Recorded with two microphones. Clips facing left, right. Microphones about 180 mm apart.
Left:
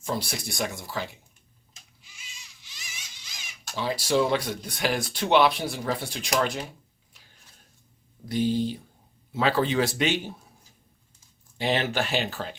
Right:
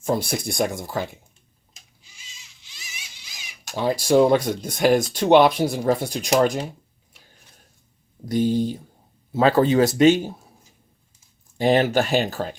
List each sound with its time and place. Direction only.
0.0 s speech: 50° right (ahead or behind)
2.7 s a sound: 15° right (ahead or behind)
3.8 s speech: 45° right (ahead or behind)
8.3 s speech: 45° right (ahead or behind)
11.5 s speech: 45° right (ahead or behind)